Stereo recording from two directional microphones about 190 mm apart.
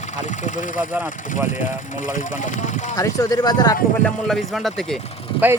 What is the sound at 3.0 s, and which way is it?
Speech, 20° left (ahead or behind).